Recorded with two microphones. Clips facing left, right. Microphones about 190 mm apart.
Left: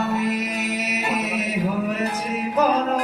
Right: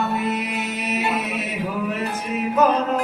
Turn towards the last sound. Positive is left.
turn(degrees=40)  # may be behind; listen again after turning